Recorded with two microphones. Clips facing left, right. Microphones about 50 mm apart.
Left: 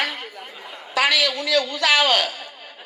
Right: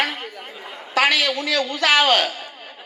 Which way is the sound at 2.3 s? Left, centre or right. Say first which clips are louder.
Right 2 dB; right.